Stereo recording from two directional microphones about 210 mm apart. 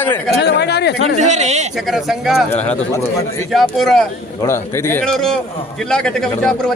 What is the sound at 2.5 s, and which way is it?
A man's voice, 10° left (ahead or behind).